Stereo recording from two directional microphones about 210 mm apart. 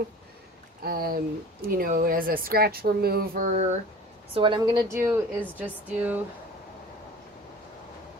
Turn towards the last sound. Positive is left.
turn(degrees=-5)  # may be behind; listen again after turning